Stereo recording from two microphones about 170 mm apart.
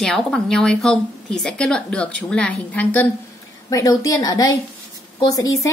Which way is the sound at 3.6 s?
20° left (ahead or behind).